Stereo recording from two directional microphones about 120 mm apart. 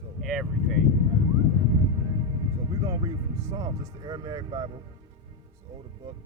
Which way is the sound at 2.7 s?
30° right (ahead or behind).